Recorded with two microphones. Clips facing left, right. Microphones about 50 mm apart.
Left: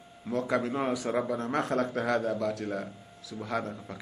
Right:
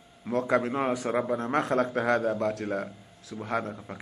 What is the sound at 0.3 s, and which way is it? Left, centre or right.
A man's voice, right.